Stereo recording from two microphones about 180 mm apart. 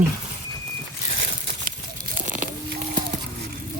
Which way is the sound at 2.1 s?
45° right (ahead or behind).